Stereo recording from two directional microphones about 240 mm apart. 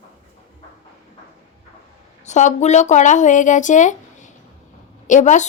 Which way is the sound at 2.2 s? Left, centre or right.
Left.